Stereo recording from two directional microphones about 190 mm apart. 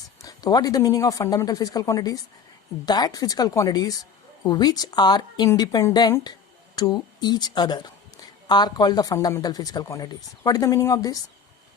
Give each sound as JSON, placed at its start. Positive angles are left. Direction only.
{"t": 0.2, "sound": "speech", "side_deg": 20}